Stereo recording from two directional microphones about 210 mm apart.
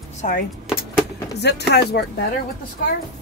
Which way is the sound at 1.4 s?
55° left (ahead or behind).